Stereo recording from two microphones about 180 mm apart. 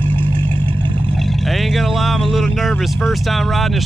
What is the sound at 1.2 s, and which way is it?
Speech, centre (ahead or behind).